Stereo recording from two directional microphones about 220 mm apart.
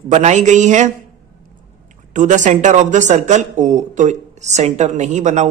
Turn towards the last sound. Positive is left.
turn(degrees=-30)  # may be behind; listen again after turning